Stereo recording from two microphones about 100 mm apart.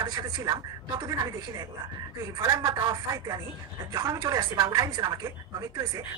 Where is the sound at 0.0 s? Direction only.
40° right (ahead or behind).